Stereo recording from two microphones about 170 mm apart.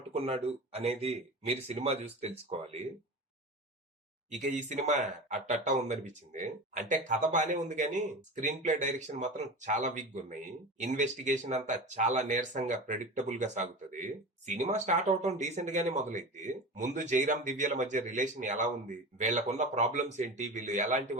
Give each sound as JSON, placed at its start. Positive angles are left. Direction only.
{"t": 0.1, "sound": "speech", "side_deg": -35}
{"t": 4.3, "sound": "speech", "side_deg": -45}